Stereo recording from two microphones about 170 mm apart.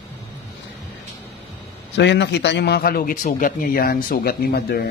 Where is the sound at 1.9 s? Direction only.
90° left; by 4.9 s 65° left (ahead or behind).